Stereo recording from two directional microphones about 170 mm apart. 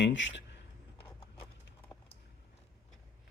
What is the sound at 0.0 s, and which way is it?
Speech, 90° left.